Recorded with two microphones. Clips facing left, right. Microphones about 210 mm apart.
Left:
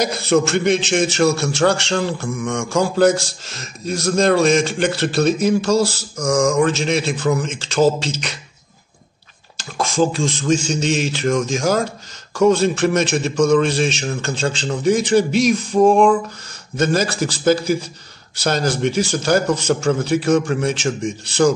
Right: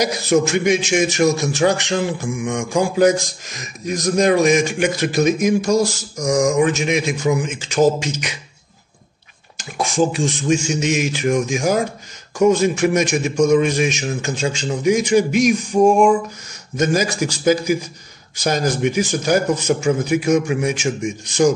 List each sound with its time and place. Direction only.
0.0 s a man's voice: 15° right (ahead or behind)
9.6 s a man's voice: 15° right (ahead or behind)